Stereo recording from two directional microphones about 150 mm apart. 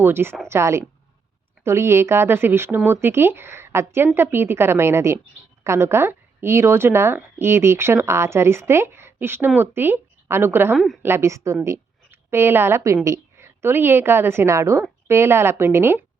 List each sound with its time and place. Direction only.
0.0 s a woman's voice: 15° right (ahead or behind)